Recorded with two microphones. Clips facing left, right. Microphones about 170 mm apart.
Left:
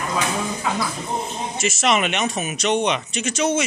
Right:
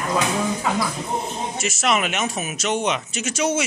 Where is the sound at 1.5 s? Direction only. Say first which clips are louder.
Left 2 dB; centre (ahead or behind).